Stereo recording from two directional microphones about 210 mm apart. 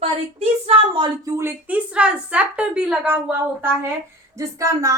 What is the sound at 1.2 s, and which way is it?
A woman's voice, 15° right (ahead or behind).